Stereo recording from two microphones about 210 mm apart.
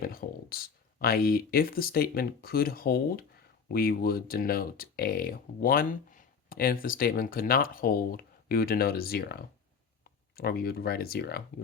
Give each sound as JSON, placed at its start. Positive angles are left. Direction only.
{"t": 0.1, "sound": "speech", "side_deg": 45}